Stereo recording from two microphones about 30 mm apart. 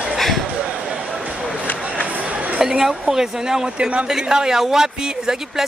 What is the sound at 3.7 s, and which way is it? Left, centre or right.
Speech, right.